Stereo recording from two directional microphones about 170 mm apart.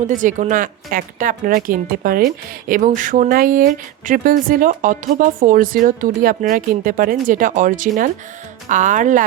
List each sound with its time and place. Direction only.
0.1 s speech: 50° right (ahead or behind)